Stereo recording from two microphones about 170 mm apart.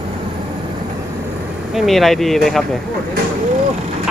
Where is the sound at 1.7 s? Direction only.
Centre (ahead or behind).